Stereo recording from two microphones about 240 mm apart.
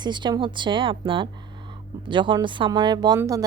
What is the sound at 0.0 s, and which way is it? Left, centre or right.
A woman's voice, centre.